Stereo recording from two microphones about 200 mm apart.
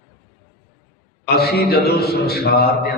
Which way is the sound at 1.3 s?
50° left (ahead or behind).